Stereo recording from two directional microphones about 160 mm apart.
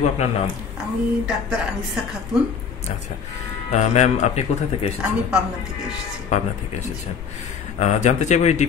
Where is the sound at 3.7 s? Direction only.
45° left (ahead or behind).